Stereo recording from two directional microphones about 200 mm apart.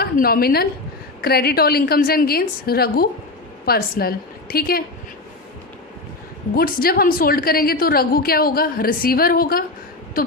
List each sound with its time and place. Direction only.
0.0 s a woman's voice: 50° left (ahead or behind)
6.6 s a woman's voice: 45° left (ahead or behind)